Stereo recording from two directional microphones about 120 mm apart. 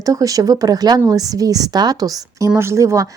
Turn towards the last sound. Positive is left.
turn(degrees=-25)  # may be behind; listen again after turning